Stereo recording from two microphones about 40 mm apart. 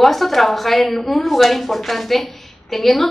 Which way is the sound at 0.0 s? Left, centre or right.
Centre.